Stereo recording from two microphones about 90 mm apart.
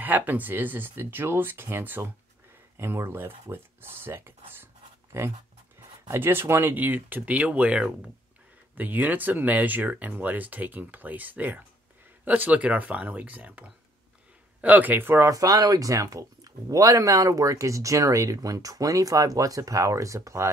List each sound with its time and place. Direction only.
0.0 s speech: 20° right (ahead or behind)
6.0 s speech: 25° right (ahead or behind)
15.3 s speech: 45° right (ahead or behind)